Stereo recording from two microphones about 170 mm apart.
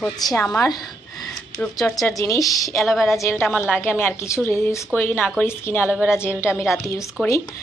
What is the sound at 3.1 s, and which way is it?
Speech, 15° left (ahead or behind).